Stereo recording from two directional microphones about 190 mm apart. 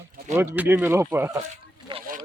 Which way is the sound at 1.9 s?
25° right (ahead or behind).